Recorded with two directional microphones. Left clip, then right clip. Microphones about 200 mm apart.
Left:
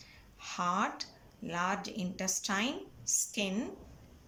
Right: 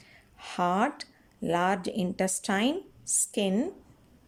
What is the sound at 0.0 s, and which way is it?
Speech, 40° right (ahead or behind).